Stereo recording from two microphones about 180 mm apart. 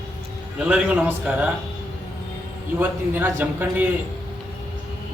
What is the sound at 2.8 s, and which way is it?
A man's voice, 10° right (ahead or behind).